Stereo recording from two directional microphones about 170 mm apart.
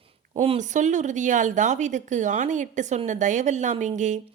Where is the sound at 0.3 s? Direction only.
40° right (ahead or behind).